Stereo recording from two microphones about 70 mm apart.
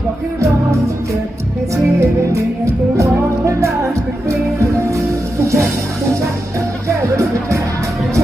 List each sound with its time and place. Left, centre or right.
1.7 s music: right
6.8 s music: right